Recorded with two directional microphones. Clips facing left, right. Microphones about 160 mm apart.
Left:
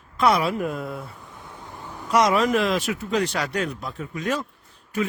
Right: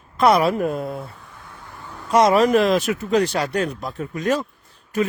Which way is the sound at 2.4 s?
40° right (ahead or behind).